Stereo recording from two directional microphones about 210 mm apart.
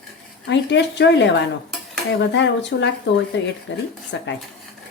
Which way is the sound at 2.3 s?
55° left (ahead or behind).